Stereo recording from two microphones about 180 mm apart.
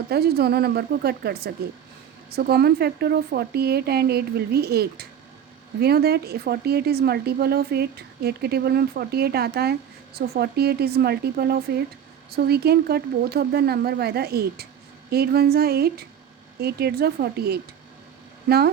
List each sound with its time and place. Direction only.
0.1 s a woman's voice: 60° right (ahead or behind)